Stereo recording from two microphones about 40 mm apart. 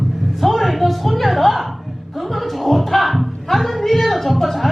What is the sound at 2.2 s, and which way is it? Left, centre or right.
Music, centre.